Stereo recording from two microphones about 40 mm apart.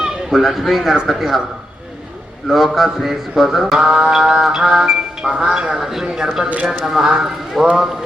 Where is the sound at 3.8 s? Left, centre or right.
Centre.